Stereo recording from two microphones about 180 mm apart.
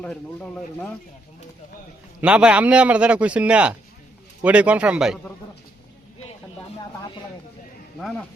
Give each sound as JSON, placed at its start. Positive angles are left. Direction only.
{"t": 0.0, "sound": "speech", "side_deg": 5}
{"t": 2.2, "sound": "a man's voice", "side_deg": -5}